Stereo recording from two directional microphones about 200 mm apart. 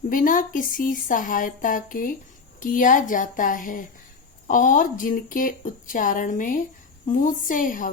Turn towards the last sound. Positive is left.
turn(degrees=40)  # may be behind; listen again after turning